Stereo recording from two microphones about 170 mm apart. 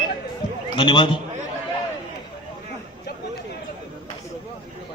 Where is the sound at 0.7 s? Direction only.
30° left (ahead or behind).